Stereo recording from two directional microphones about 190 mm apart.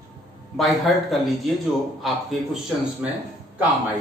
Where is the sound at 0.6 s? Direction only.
Centre (ahead or behind).